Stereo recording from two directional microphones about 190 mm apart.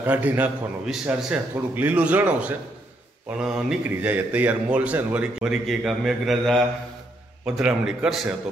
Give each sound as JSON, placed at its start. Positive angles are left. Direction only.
{"t": 0.0, "sound": "a man's voice", "side_deg": -10}